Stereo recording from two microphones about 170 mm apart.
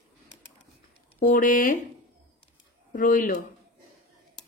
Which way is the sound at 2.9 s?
55° left (ahead or behind).